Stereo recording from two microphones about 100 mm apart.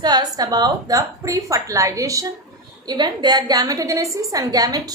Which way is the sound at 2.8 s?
45° right (ahead or behind).